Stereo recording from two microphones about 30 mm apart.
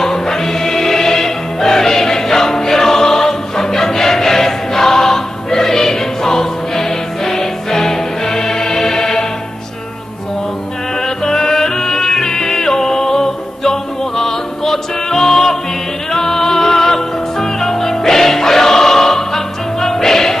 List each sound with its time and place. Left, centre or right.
0.0 s music: centre
11.0 s music: centre